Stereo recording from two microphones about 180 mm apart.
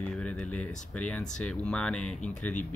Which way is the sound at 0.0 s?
5° left (ahead or behind).